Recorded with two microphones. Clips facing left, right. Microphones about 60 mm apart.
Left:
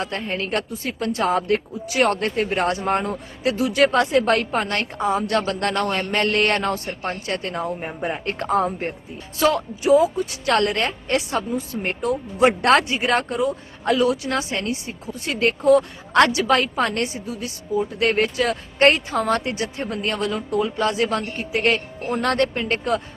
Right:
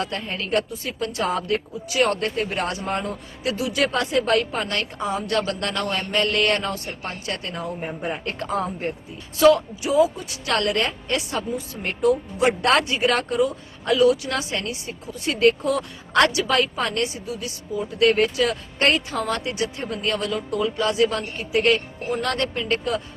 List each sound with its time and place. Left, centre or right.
0.0 s speech: left